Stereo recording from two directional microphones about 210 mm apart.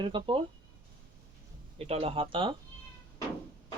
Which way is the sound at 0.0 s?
25° right (ahead or behind).